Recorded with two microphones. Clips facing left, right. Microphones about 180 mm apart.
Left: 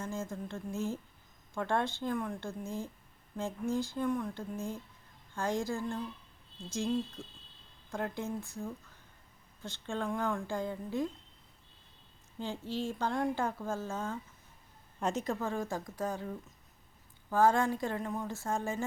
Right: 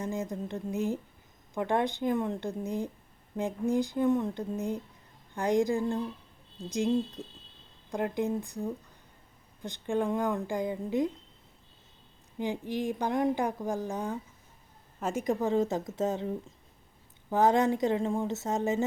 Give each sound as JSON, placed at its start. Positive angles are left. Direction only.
{"t": 0.0, "sound": "speech", "side_deg": -15}
{"t": 12.4, "sound": "speech", "side_deg": -15}